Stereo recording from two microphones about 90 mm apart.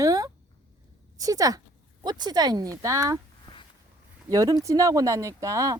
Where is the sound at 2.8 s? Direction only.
40° right (ahead or behind).